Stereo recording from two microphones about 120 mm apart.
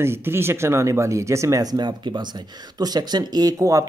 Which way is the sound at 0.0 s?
20° right (ahead or behind).